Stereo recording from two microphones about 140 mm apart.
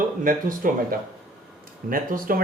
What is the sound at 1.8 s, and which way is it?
Speech, 85° right.